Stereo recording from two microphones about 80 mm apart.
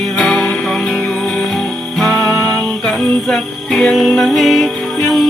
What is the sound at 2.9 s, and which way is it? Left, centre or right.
Music, centre.